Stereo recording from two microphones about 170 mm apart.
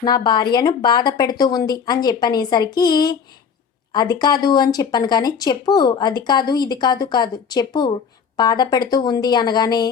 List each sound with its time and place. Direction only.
0.0 s speech: 25° left (ahead or behind)